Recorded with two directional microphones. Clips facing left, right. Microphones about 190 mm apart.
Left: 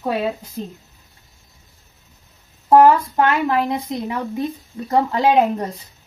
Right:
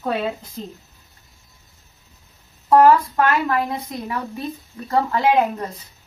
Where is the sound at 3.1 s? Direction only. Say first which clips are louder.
Left 2 dB; 20° left (ahead or behind).